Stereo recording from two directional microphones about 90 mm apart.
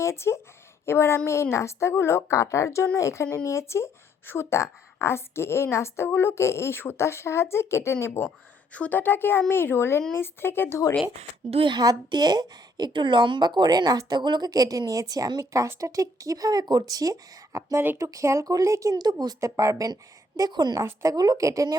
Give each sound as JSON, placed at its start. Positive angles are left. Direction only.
{"t": 0.0, "sound": "a woman's voice", "side_deg": 30}
{"t": 8.7, "sound": "a woman's voice", "side_deg": 15}
{"t": 11.5, "sound": "speech", "side_deg": -70}
{"t": 11.8, "sound": "speech", "side_deg": -50}
{"t": 18.9, "sound": "speech", "side_deg": -50}
{"t": 19.4, "sound": "speech", "side_deg": -35}